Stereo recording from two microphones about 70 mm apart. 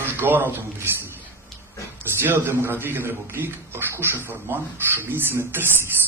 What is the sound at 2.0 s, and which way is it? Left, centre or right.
A man's voice, right.